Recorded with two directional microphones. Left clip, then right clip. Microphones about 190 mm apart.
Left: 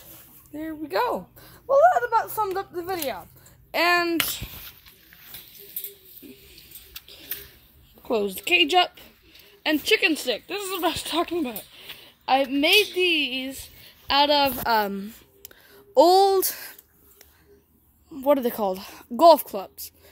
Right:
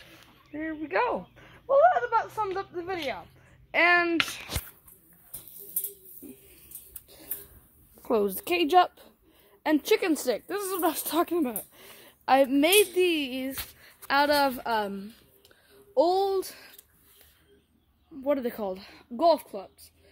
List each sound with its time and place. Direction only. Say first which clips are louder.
0.1 s speech: left 2 dB; 5° right (ahead or behind)
8.4 s speech: left 4 dB; 80° right
9.7 s speech: left 3 dB; 25° right (ahead or behind)
10.2 s speech: left 1 dB; 80° right
10.7 s speech: left 3 dB; 20° right (ahead or behind)
14.0 s a woman's voice: left 4 dB; 10° right (ahead or behind)
14.6 s a sound: left 6 dB; 25° left (ahead or behind); by 16.3 s 50° left (ahead or behind)
16.3 s speech: left 7 dB; 20° left (ahead or behind)
18.2 s speech: left 7 dB; 25° left (ahead or behind)